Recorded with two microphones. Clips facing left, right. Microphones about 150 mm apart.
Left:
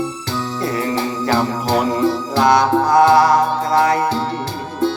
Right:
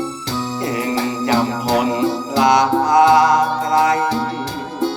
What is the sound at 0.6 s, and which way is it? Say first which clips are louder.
Music: even; 20° right (ahead or behind).